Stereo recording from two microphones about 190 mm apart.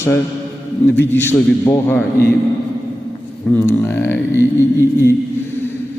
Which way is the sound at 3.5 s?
10° left (ahead or behind).